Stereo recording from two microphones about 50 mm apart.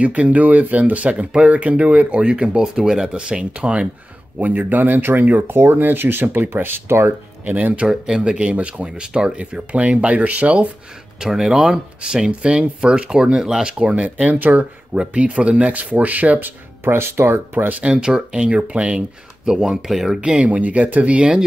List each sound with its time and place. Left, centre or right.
0.0 s speech: right
2.6 s speech: centre
4.4 s speech: right
7.4 s speech: right
7.8 s speech: centre
11.1 s speech: centre; by 16.9 s right
16.9 s speech: right
17.8 s speech: centre
20.2 s speech: centre
20.4 s speech: right